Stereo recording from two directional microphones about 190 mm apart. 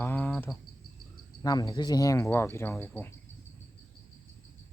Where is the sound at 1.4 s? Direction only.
20° left (ahead or behind).